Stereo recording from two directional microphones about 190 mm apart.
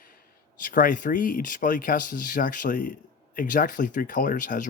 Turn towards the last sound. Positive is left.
turn(degrees=45)  # may be behind; listen again after turning